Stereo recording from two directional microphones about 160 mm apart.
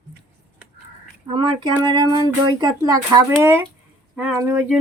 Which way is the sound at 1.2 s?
30° right (ahead or behind).